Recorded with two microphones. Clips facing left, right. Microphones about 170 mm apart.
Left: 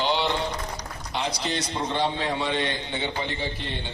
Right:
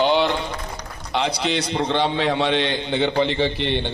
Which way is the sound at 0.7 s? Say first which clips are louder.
Right 6 dB; 65° right (ahead or behind).